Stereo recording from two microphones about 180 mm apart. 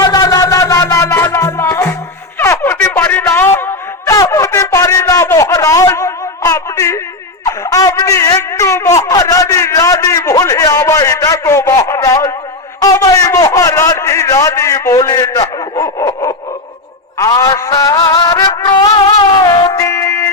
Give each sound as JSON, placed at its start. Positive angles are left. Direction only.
{"t": 0.0, "sound": "music", "side_deg": 20}
{"t": 2.4, "sound": "a sound", "side_deg": 15}
{"t": 18.4, "sound": "music", "side_deg": 25}